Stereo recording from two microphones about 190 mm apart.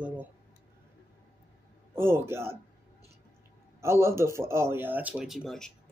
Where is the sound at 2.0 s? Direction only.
10° right (ahead or behind).